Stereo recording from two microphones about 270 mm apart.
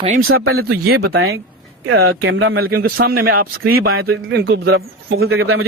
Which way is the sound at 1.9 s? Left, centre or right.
Right.